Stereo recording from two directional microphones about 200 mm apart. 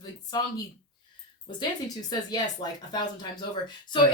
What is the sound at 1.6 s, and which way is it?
Speech, 20° left (ahead or behind).